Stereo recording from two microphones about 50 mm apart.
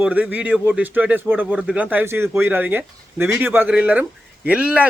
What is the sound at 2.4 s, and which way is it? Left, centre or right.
Speech, right.